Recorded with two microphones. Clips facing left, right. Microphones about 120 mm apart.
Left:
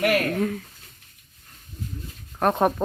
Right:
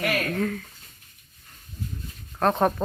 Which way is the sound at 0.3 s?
20° left (ahead or behind).